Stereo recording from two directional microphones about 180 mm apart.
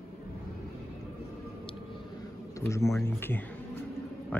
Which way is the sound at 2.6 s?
15° left (ahead or behind).